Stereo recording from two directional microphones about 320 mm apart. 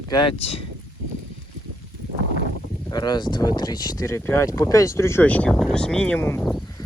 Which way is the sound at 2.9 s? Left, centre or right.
Centre.